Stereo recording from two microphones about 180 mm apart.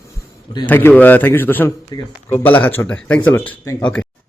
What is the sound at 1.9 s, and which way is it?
Speech, 20° left (ahead or behind).